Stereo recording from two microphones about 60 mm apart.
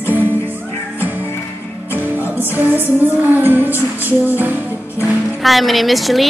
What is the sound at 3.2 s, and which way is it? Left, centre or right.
Music, right.